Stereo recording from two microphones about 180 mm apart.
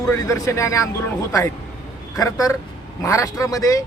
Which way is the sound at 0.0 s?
15° left (ahead or behind).